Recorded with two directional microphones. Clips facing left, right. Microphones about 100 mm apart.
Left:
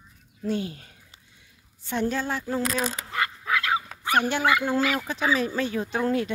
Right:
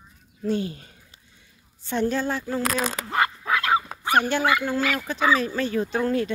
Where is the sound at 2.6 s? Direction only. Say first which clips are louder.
Right 2 dB; 60° right (ahead or behind).